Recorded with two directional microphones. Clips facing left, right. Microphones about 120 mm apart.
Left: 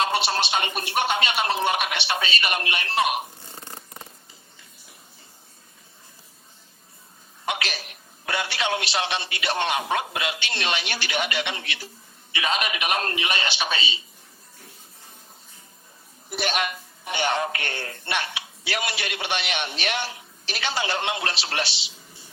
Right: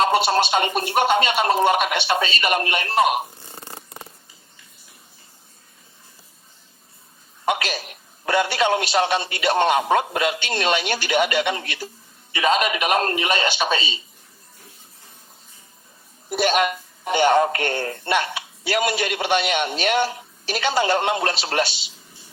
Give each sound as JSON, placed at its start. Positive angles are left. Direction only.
{"t": 0.0, "sound": "a man's voice", "side_deg": -45}
{"t": 7.4, "sound": "a man's voice", "side_deg": -45}
{"t": 16.3, "sound": "a man's voice", "side_deg": -45}